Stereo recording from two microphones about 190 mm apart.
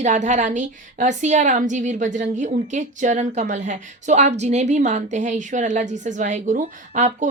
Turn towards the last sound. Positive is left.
turn(degrees=-40)  # may be behind; listen again after turning